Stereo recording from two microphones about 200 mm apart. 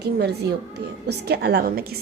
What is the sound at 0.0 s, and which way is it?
A woman's voice, 55° right (ahead or behind).